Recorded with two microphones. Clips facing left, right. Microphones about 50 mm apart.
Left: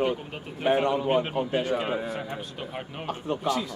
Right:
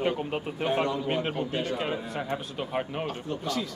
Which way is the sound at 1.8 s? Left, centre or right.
Centre.